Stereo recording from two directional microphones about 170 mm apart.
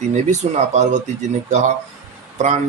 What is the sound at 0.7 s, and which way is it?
A man's voice, 45° right (ahead or behind).